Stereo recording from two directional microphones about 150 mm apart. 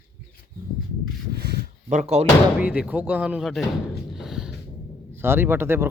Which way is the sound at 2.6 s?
10° right (ahead or behind).